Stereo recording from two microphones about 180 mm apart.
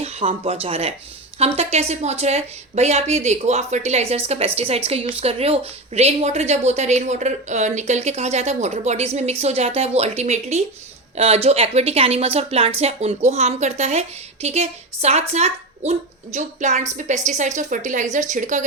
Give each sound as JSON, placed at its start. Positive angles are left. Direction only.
{"t": 0.0, "sound": "a woman's voice", "side_deg": -35}